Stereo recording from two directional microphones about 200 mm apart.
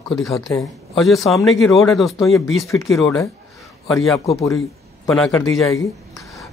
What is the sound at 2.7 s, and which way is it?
Speech, 15° left (ahead or behind).